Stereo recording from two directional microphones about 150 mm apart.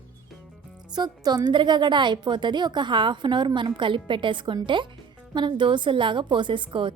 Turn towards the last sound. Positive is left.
turn(degrees=-35)  # may be behind; listen again after turning